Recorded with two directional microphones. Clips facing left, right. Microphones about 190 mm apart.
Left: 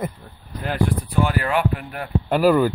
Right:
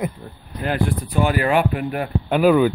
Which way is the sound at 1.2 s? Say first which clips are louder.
Right 4 dB; 15° right (ahead or behind).